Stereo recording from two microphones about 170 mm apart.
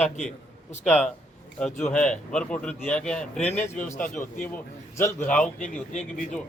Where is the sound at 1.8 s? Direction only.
5° left (ahead or behind).